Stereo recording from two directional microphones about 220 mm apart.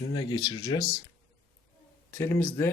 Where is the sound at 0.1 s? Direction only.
20° left (ahead or behind).